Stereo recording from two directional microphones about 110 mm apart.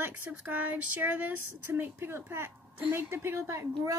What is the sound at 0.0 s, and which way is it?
A woman's voice, 15° right (ahead or behind).